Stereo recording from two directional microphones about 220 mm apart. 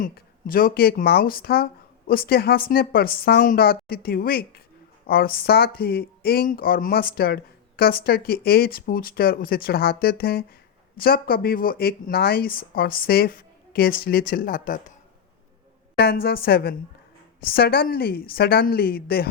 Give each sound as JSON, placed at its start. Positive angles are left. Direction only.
{"t": 0.0, "sound": "speech", "side_deg": 40}
{"t": 16.0, "sound": "speech", "side_deg": 45}